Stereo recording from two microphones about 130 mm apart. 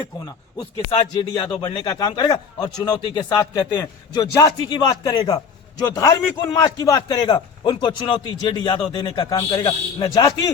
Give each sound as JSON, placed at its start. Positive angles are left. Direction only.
{"t": 1.3, "sound": "a man's voice", "side_deg": 30}